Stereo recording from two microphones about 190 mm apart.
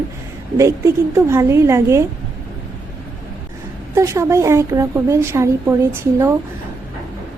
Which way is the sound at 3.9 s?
15° right (ahead or behind).